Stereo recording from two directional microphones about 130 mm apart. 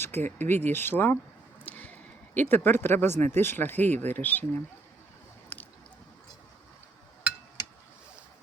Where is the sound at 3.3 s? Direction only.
15° left (ahead or behind).